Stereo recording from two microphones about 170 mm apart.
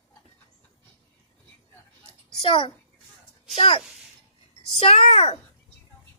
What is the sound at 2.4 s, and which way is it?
A woman's voice, 30° left (ahead or behind).